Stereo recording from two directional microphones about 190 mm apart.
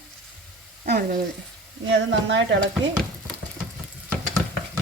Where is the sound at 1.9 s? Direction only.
70° right (ahead or behind).